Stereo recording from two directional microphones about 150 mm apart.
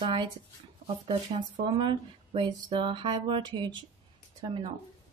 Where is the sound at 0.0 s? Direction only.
30° right (ahead or behind).